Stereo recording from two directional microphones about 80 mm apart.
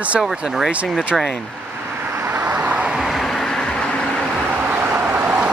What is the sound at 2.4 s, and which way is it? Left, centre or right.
Vehicle, centre.